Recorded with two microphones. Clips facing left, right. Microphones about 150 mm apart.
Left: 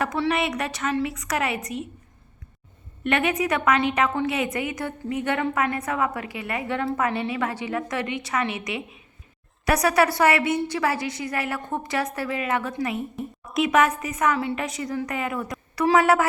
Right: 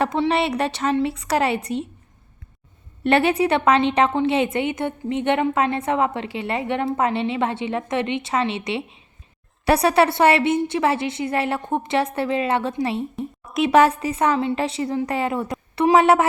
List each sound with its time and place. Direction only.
0.0 s a woman's voice: 30° right (ahead or behind)
3.0 s a woman's voice: 30° right (ahead or behind)
13.4 s a woman's voice: centre (ahead or behind)
13.7 s a woman's voice: 30° right (ahead or behind)